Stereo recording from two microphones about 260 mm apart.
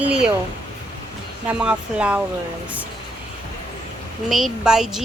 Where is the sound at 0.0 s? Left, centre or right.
Centre.